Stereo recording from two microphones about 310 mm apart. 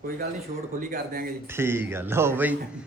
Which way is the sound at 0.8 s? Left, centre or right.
Right.